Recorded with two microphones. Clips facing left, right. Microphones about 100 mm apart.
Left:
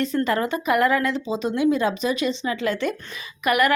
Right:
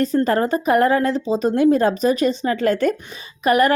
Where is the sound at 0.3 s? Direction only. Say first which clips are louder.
Right 4 dB; 40° right (ahead or behind).